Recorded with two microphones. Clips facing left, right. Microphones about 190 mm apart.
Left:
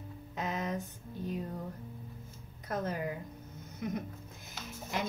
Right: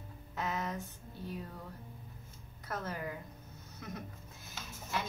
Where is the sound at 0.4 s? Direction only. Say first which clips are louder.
Left 2 dB; 20° left (ahead or behind).